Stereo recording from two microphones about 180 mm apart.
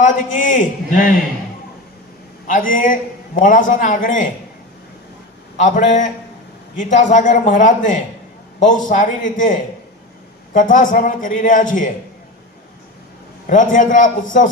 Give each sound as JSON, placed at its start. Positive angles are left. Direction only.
{"t": 0.0, "sound": "a man's voice", "side_deg": 45}
{"t": 2.5, "sound": "a man's voice", "side_deg": 50}
{"t": 5.5, "sound": "a man's voice", "side_deg": 45}
{"t": 13.5, "sound": "a man's voice", "side_deg": 45}